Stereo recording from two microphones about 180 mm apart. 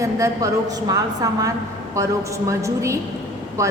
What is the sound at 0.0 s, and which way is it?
A woman's voice, 15° right (ahead or behind).